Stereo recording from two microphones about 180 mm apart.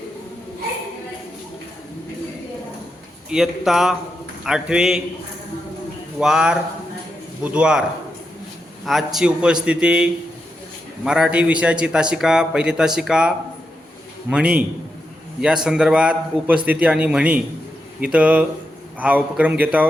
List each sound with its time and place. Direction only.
3.2 s a man's voice: 5° right (ahead or behind)
6.1 s a man's voice: 5° right (ahead or behind)
8.9 s a man's voice: centre (ahead or behind)